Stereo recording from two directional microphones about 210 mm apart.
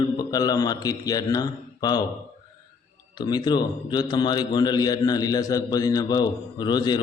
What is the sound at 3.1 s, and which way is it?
A man's voice, 20° left (ahead or behind).